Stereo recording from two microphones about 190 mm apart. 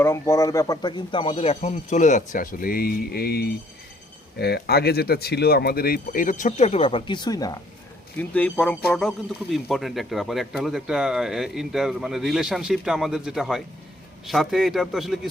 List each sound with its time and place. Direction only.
0.0 s speech: 15° left (ahead or behind)
8.2 s speech: 10° left (ahead or behind)